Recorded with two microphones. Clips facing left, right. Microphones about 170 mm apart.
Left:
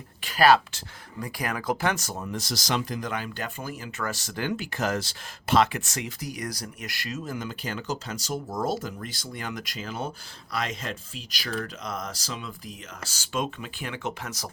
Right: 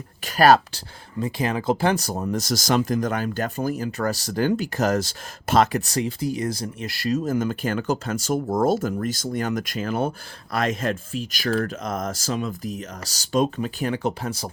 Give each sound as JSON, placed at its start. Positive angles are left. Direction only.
{"t": 0.3, "sound": "speech", "side_deg": -45}
{"t": 1.2, "sound": "speech", "side_deg": -25}